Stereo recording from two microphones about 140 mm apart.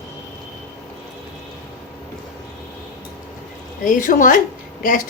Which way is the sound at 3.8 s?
70° left (ahead or behind).